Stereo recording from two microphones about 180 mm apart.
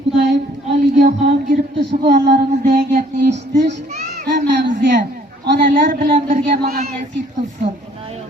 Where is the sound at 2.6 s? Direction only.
45° right (ahead or behind).